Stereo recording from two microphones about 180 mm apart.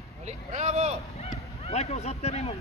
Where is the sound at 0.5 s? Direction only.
40° right (ahead or behind).